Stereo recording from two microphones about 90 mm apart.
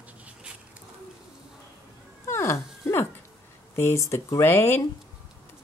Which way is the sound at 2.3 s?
30° left (ahead or behind).